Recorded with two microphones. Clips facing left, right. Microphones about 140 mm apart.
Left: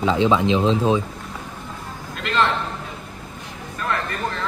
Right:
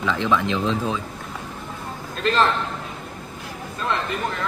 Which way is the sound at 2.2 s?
35° right (ahead or behind).